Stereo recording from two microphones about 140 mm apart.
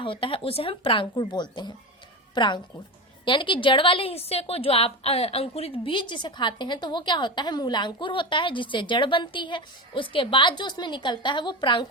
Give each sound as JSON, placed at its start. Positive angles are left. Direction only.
{"t": 0.0, "sound": "a woman's voice", "side_deg": 40}